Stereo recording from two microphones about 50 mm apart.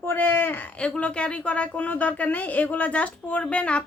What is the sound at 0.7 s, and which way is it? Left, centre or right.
Speech, left.